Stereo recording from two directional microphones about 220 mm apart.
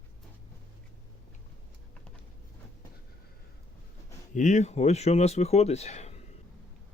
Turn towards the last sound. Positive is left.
turn(degrees=30)  # may be behind; listen again after turning